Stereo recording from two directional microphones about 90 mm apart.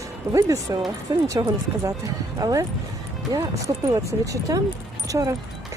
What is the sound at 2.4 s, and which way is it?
Speech, 40° right (ahead or behind).